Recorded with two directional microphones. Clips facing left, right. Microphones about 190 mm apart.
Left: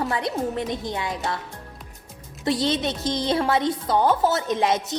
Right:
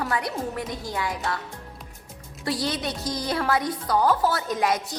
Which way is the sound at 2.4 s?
25° left (ahead or behind).